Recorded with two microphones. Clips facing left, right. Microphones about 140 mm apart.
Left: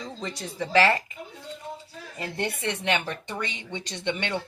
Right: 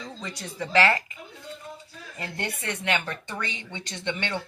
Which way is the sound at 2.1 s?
25° left (ahead or behind).